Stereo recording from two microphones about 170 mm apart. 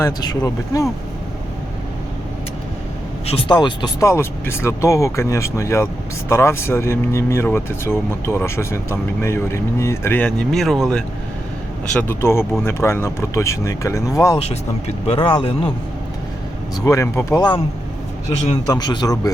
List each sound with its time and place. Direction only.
0.0 s speech: 20° left (ahead or behind)
3.2 s speech: 30° left (ahead or behind)
4.0 s speech: 15° left (ahead or behind)
11.9 s speech: 15° left (ahead or behind)
14.3 s speech: 40° left (ahead or behind)
16.8 s speech: 20° left (ahead or behind)
18.7 s speech: 25° left (ahead or behind)